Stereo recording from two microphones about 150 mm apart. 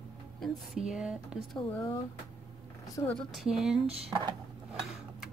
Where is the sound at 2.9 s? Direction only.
15° left (ahead or behind).